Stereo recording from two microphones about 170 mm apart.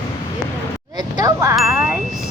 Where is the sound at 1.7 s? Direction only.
10° right (ahead or behind).